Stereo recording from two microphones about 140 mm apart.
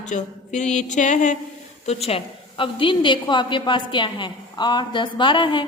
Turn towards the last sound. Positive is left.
turn(degrees=35)  # may be behind; listen again after turning